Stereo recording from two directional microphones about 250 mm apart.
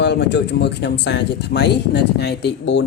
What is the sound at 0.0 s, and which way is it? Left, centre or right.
Speech, left.